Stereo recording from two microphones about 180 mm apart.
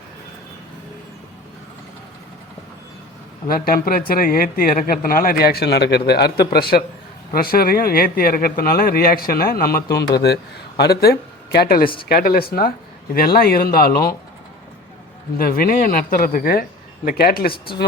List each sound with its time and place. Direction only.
3.5 s speech: 55° left (ahead or behind)
15.4 s speech: 55° left (ahead or behind)